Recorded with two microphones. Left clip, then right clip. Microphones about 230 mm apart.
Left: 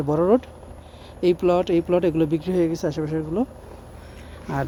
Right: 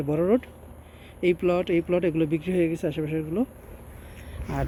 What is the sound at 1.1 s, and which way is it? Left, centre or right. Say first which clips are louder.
Speech: left 3 dB; left.